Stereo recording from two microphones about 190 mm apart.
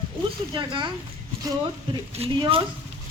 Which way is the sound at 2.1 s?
30° right (ahead or behind).